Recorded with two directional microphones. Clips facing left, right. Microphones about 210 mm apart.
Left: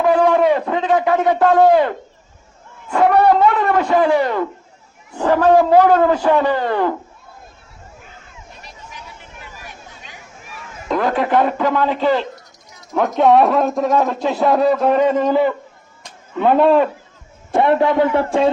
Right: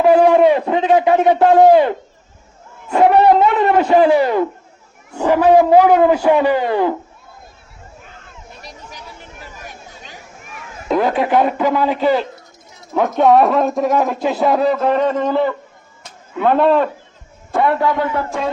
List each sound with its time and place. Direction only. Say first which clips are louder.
0.0 s a man's voice: right 4 dB; 25° right (ahead or behind)
4.1 s a man's voice: right 3 dB; 10° right (ahead or behind)
8.9 s a sound: right 2 dB; 35° right (ahead or behind)
10.8 s a sound: right 3 dB; 10° right (ahead or behind)
11.1 s a man's voice: right 1 dB; 5° right (ahead or behind)
17.5 s a man's voice: left 2 dB; 25° left (ahead or behind)